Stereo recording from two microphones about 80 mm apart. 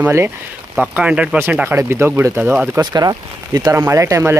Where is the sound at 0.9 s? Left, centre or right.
Centre.